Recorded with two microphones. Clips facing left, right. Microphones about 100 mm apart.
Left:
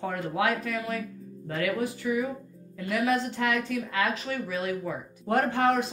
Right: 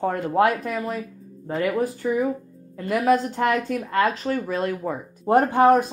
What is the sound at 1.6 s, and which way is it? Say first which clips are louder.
Speech: right 5 dB; 40° right (ahead or behind).